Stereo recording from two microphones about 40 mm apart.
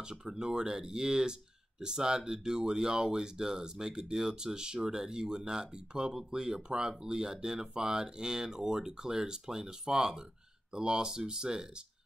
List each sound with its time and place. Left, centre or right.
0.0 s speech: centre